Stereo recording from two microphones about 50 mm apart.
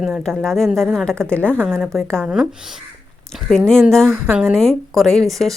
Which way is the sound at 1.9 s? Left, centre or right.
Centre.